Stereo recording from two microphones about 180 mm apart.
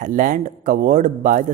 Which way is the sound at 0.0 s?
45° right (ahead or behind).